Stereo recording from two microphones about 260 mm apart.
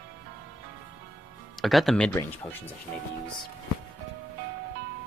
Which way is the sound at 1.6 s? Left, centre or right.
Centre.